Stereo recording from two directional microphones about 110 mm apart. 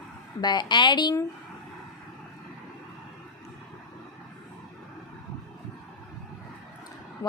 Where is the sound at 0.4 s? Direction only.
45° left (ahead or behind).